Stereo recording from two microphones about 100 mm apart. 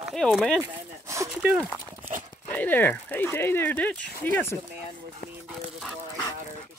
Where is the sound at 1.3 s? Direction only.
10° right (ahead or behind).